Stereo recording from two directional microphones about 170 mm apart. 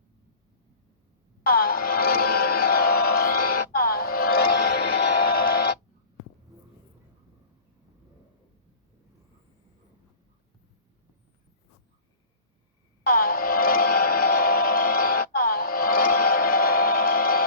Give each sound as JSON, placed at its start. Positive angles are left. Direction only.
{"t": 1.5, "sound": "music", "side_deg": 60}
{"t": 13.1, "sound": "music", "side_deg": 60}